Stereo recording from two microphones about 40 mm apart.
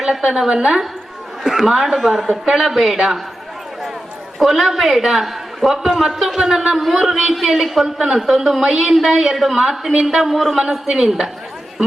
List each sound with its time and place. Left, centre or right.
0.0 s speech: centre
1.5 s speech: centre
2.0 s a woman's voice: centre
2.3 s a woman's voice: centre
4.4 s speech: centre
5.9 s a woman's voice: centre
6.1 s a woman's voice: centre